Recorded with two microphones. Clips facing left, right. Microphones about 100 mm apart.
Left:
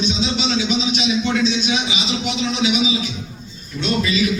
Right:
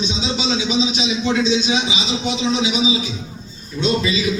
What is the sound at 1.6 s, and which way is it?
A man's voice, 25° right (ahead or behind).